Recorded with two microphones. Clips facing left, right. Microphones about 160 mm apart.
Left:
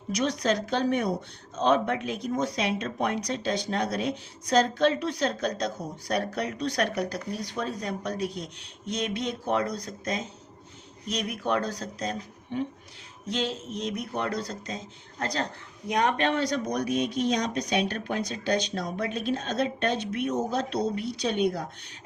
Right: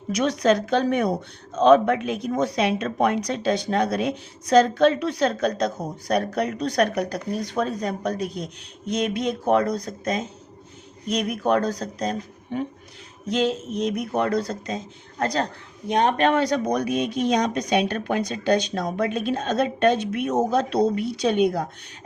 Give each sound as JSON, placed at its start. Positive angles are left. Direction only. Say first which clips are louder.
{"t": 0.1, "sound": "a woman's voice", "louder": "right 6 dB", "side_deg": -60}
{"t": 13.8, "sound": "speech", "louder": "right 7 dB", "side_deg": -50}
{"t": 15.9, "sound": "speech", "louder": "right 4 dB", "side_deg": -30}
{"t": 16.2, "sound": "a woman's voice", "louder": "right 6 dB", "side_deg": -55}